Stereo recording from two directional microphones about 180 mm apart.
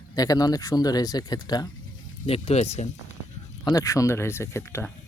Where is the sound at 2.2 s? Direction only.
35° left (ahead or behind).